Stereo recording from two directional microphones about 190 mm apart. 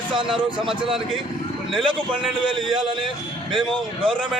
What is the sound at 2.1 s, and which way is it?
Speech, 25° right (ahead or behind).